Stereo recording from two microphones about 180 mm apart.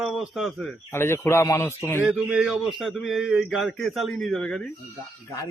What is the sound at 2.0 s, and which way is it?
A man's voice, 5° right (ahead or behind).